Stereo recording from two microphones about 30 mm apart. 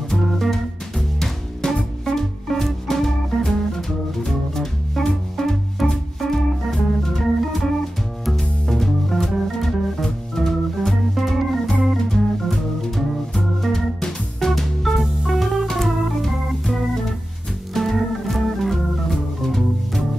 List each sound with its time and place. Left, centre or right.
0.1 s music: centre
6.5 s organ: centre
8.4 s music: centre
10.3 s organ: centre
13.9 s music: centre
15.0 s organ: centre